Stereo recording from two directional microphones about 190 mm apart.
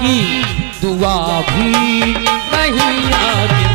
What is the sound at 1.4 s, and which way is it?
Music, 15° right (ahead or behind).